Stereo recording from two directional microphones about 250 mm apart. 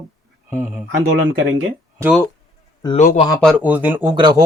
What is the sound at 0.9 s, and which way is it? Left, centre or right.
Speech, right.